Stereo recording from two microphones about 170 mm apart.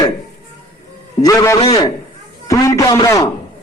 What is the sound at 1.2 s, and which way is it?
A man's voice, 20° left (ahead or behind).